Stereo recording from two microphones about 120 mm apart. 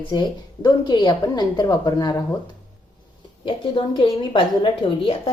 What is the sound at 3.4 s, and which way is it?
A woman's voice, 45° left (ahead or behind).